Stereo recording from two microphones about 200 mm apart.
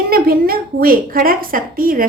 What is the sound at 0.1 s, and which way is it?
A woman's voice, 50° right (ahead or behind).